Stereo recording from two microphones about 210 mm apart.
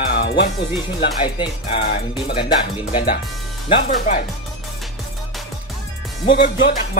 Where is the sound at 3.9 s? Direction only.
35° left (ahead or behind).